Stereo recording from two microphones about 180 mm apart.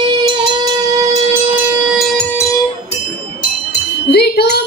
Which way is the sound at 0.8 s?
20° right (ahead or behind).